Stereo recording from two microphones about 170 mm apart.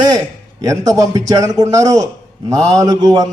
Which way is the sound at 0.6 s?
20° right (ahead or behind).